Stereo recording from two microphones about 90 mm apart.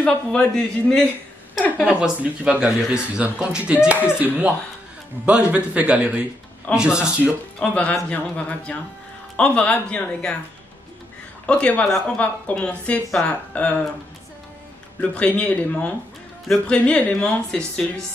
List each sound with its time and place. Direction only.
0.0 s speech: 10° left (ahead or behind)
1.9 s speech: 10° right (ahead or behind)
7.6 s speech: 10° left (ahead or behind)
11.4 s speech: 15° left (ahead or behind)
15.0 s speech: 15° left (ahead or behind)